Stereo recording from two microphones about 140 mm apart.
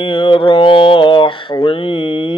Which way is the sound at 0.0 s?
35° left (ahead or behind).